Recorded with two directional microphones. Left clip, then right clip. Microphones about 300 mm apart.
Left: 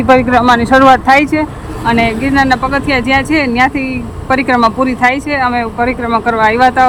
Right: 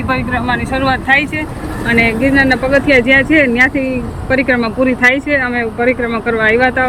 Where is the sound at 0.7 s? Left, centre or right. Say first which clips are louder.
Left 8 dB; left.